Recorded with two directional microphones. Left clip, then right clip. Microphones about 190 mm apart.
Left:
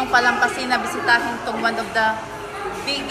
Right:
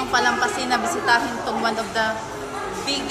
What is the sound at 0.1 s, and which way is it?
A woman's voice, 5° right (ahead or behind).